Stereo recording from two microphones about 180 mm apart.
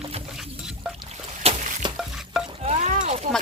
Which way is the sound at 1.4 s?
35° right (ahead or behind).